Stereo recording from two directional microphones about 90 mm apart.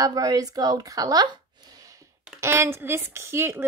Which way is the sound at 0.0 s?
45° right (ahead or behind).